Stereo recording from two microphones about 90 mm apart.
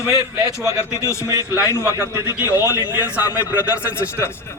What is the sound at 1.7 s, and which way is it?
Speech, 35° right (ahead or behind).